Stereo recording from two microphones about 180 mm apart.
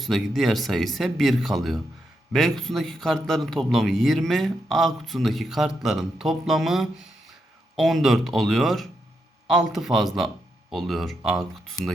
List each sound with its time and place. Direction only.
0.0 s a man's voice: centre (ahead or behind)